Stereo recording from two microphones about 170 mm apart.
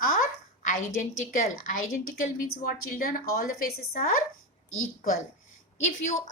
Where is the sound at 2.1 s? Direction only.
50° left (ahead or behind).